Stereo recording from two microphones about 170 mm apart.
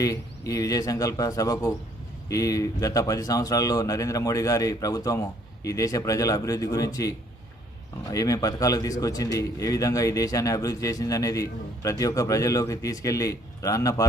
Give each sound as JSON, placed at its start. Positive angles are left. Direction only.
{"t": 0.0, "sound": "a man's voice", "side_deg": 20}
{"t": 8.1, "sound": "a man's voice", "side_deg": 20}